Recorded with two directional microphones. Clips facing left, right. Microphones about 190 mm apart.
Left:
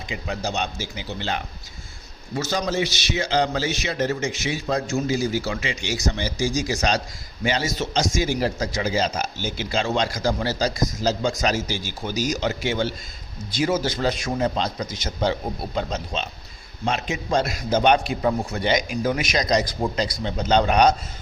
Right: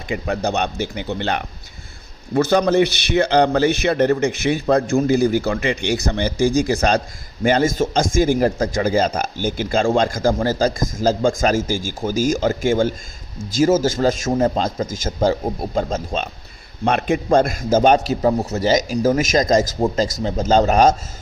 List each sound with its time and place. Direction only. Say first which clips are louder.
0.1 s a man's voice: right 7 dB; 60° right (ahead or behind)
16.8 s a man's voice: right 7 dB; 55° right (ahead or behind)